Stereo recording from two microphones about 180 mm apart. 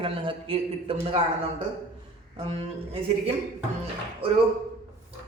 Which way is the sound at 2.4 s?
30° right (ahead or behind).